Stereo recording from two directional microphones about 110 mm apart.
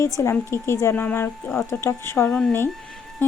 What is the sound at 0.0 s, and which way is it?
Speech, 30° left (ahead or behind).